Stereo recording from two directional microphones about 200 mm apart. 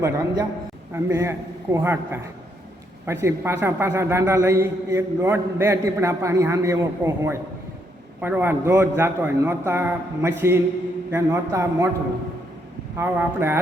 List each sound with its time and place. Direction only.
0.0 s a man's voice: 15° right (ahead or behind)
13.0 s a man's voice: 10° right (ahead or behind)